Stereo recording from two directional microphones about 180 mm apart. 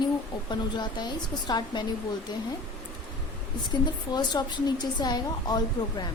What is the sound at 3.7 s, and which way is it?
A woman's voice, 25° left (ahead or behind).